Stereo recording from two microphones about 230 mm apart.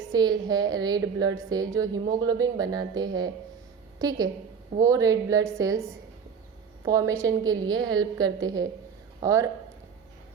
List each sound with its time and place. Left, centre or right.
0.1 s a woman's voice: centre
6.8 s a woman's voice: centre